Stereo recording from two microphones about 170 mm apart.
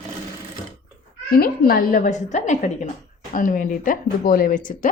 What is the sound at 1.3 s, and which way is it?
A woman's voice, 60° left (ahead or behind).